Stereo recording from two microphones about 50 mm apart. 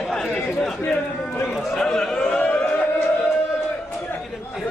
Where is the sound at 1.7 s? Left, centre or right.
Centre.